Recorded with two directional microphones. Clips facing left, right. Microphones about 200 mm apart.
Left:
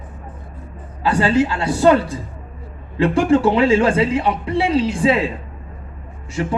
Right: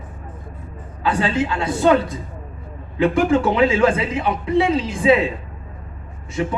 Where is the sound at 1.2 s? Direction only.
30° left (ahead or behind).